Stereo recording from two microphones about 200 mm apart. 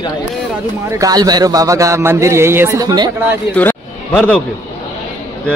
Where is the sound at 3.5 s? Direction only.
10° left (ahead or behind).